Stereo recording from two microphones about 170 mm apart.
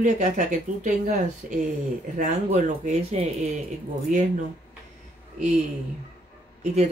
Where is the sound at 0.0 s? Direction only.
45° right (ahead or behind).